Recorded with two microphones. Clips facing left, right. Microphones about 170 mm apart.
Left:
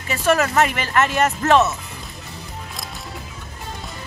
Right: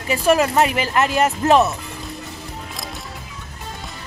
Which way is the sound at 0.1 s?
10° right (ahead or behind).